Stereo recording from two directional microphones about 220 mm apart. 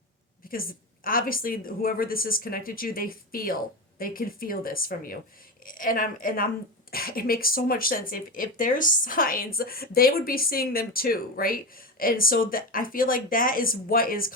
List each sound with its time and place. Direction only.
0.4 s speech: 40° left (ahead or behind)